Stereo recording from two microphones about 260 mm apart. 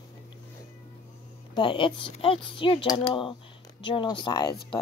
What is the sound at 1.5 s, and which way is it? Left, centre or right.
Speech, centre.